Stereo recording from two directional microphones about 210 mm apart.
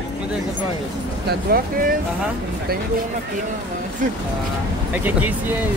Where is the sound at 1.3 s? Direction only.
45° right (ahead or behind).